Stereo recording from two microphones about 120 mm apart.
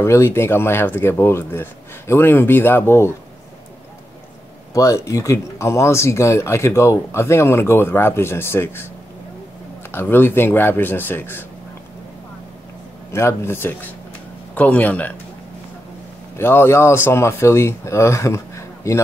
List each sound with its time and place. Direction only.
0.0 s speech: 25° left (ahead or behind)
4.7 s speech: 25° left (ahead or behind)
9.8 s a man's voice: 20° left (ahead or behind)
13.1 s a man's voice: 20° left (ahead or behind)
16.3 s speech: 20° left (ahead or behind)